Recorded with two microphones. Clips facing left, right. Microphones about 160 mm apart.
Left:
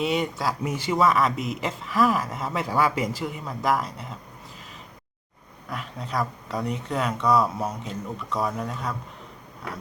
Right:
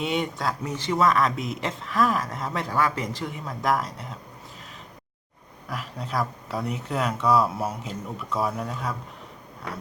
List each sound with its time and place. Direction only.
0.0 s speech: centre (ahead or behind)
5.6 s speech: centre (ahead or behind)